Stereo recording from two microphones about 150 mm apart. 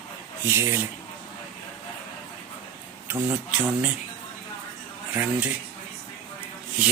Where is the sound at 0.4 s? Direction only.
15° right (ahead or behind).